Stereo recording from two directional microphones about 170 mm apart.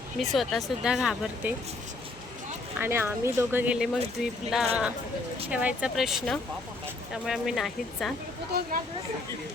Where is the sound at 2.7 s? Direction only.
15° right (ahead or behind).